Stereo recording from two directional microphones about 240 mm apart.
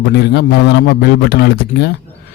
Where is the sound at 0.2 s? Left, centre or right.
Left.